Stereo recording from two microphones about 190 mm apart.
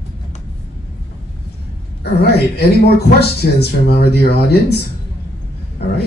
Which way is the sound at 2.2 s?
55° left (ahead or behind).